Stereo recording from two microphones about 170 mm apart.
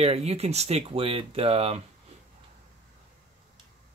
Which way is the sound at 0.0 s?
35° right (ahead or behind).